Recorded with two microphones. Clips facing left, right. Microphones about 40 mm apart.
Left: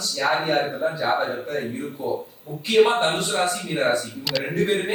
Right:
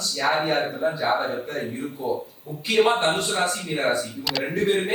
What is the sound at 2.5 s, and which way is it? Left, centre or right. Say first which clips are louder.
Speech: left 3 dB; left.